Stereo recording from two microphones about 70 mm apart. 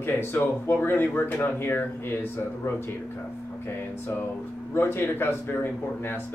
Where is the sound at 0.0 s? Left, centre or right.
Left.